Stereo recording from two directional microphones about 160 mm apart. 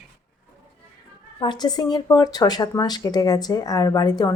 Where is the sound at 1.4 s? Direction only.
25° left (ahead or behind).